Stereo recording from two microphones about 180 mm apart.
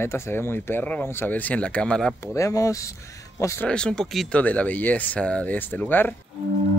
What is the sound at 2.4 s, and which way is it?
Speech, 15° left (ahead or behind).